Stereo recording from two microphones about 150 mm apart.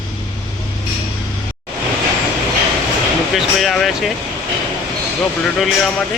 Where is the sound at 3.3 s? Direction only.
Centre (ahead or behind).